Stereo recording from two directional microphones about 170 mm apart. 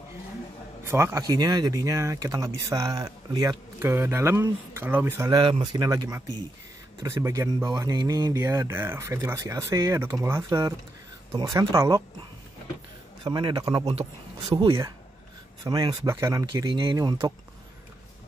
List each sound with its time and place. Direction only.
0.8 s speech: 15° right (ahead or behind)
5.4 s speech: 25° right (ahead or behind)
13.2 s speech: 30° right (ahead or behind)